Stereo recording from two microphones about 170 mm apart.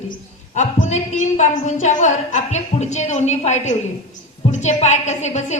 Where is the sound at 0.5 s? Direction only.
45° left (ahead or behind).